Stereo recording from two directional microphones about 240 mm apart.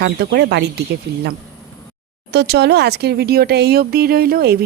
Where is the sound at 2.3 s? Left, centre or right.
Right.